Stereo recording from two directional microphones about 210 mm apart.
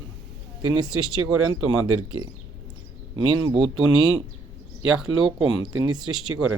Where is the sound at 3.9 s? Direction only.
20° left (ahead or behind).